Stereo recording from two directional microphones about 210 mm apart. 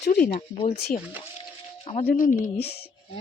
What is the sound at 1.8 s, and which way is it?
Music, 30° left (ahead or behind).